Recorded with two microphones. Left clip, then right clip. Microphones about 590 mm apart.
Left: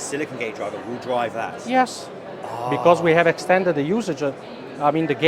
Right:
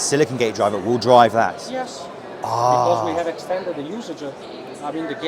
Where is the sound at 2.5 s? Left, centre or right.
Right.